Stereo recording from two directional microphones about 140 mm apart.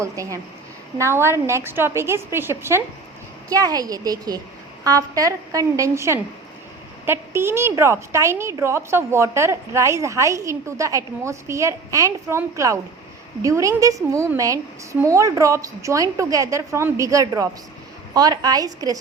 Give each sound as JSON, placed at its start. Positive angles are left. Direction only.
{"t": 0.0, "sound": "a woman's voice", "side_deg": -25}